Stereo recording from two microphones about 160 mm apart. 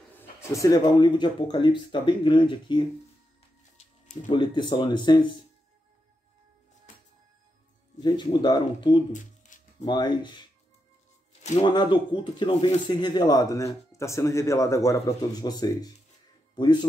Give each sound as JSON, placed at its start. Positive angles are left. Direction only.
{"t": 0.2, "sound": "speech", "side_deg": 15}
{"t": 3.7, "sound": "music", "side_deg": 50}
{"t": 4.3, "sound": "speech", "side_deg": 30}
{"t": 8.0, "sound": "speech", "side_deg": 30}
{"t": 9.1, "sound": "a sound", "side_deg": 50}
{"t": 9.8, "sound": "speech", "side_deg": 25}
{"t": 11.6, "sound": "speech", "side_deg": 30}